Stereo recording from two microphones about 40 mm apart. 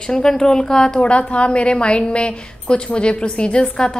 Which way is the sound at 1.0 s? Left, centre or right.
Left.